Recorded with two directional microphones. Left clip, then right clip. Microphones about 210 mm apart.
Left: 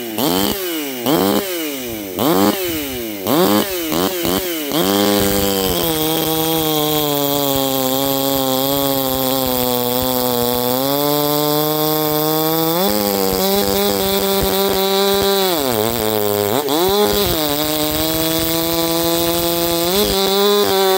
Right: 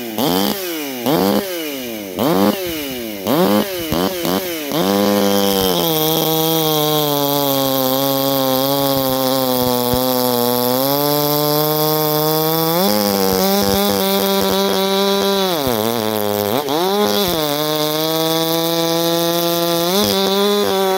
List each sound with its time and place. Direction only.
0.2 s chainsaw: 15° left (ahead or behind)
3.3 s a sound: 20° left (ahead or behind)
16.3 s fart: 15° left (ahead or behind)
18.2 s sawing: 10° left (ahead or behind)